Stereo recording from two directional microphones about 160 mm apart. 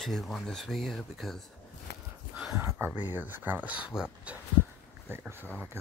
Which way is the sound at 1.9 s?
90° left.